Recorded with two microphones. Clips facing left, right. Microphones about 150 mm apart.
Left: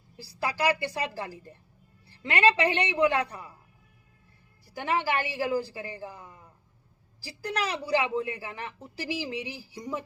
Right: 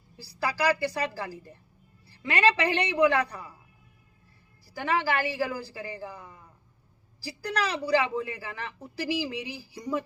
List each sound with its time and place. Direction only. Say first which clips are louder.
0.4 s a woman's voice: right 1 dB; 20° left (ahead or behind)
4.7 s a woman's voice: right 1 dB; 20° left (ahead or behind)
7.4 s a woman's voice: right 1 dB; 20° left (ahead or behind)